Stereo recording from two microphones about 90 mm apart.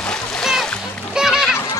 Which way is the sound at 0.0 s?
10° left (ahead or behind).